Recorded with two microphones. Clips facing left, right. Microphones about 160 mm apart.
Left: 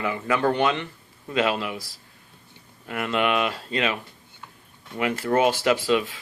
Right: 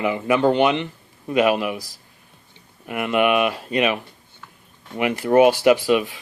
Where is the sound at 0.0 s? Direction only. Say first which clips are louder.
Right 5 dB; 20° right (ahead or behind).